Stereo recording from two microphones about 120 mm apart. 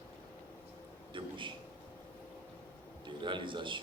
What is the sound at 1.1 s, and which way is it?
Speech, 45° right (ahead or behind).